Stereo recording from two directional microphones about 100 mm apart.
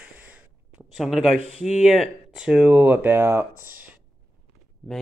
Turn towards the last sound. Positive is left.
turn(degrees=-20)  # may be behind; listen again after turning